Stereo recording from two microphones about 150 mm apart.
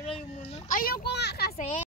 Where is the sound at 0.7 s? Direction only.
80° left.